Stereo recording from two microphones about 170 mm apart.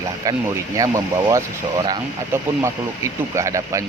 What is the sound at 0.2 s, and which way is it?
Speech, 20° right (ahead or behind).